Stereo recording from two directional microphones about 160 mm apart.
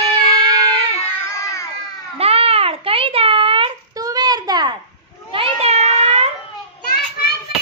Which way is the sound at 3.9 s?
25° right (ahead or behind).